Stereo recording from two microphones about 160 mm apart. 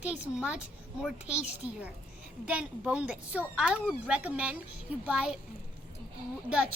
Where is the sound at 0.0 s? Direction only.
10° right (ahead or behind).